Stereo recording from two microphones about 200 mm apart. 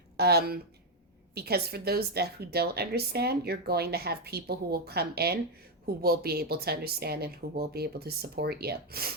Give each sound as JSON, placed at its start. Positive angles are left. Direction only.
{"t": 0.2, "sound": "a woman's voice", "side_deg": -50}